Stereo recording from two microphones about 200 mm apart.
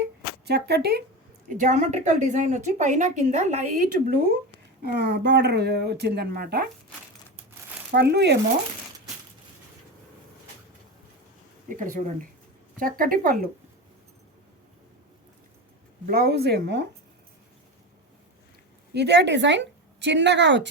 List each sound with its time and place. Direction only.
0.4 s speech: 55° right (ahead or behind)
1.5 s a woman's voice: 40° right (ahead or behind)
7.9 s speech: 55° right (ahead or behind)
11.7 s a woman's voice: 40° right (ahead or behind)
16.0 s speech: 50° right (ahead or behind)
18.9 s speech: 55° right (ahead or behind)